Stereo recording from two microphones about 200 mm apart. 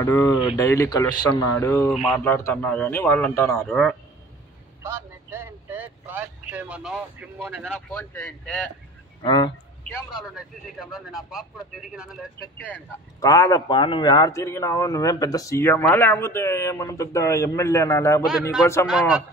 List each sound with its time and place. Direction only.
0.0 s speech: 15° left (ahead or behind)
2.0 s speech: centre (ahead or behind)
4.8 s speech: 10° right (ahead or behind)
7.9 s speech: 5° left (ahead or behind)
9.2 s speech: 20° left (ahead or behind)
10.2 s speech: centre (ahead or behind)
12.5 s speech: 10° left (ahead or behind)
18.9 s speech: 5° right (ahead or behind)